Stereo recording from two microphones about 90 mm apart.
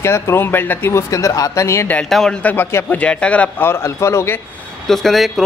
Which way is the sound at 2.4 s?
15° left (ahead or behind).